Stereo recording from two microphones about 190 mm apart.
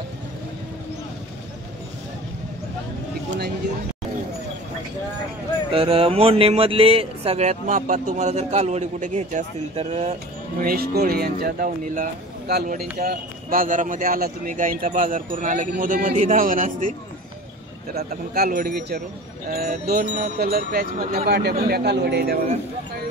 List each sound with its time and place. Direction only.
5.7 s speech: 30° right (ahead or behind)
10.6 s speech: 50° right (ahead or behind)
17.9 s speech: 50° right (ahead or behind)